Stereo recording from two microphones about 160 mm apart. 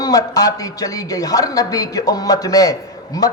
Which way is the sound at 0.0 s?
25° left (ahead or behind).